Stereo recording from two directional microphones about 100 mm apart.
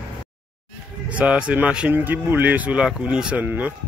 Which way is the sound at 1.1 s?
15° right (ahead or behind).